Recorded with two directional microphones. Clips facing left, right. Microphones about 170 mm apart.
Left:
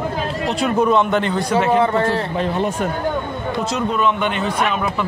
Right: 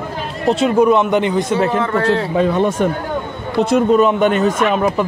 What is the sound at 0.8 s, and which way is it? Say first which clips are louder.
Speech: right 2 dB; 15° right (ahead or behind).